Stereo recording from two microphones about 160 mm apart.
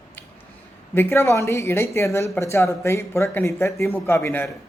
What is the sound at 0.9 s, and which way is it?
Speech, 15° left (ahead or behind).